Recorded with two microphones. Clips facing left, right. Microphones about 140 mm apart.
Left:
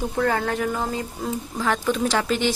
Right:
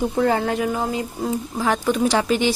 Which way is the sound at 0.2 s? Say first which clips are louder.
Right 2 dB; 20° right (ahead or behind).